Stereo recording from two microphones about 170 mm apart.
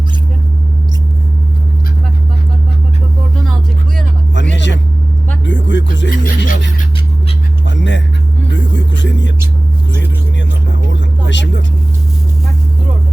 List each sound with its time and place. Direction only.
4.5 s vehicle: 90° left
5.5 s music: 90° left; by 6.8 s 55° left (ahead or behind)
7.7 s a sound: 90° left
8.5 s music: 90° left
11.3 s vehicle: 90° left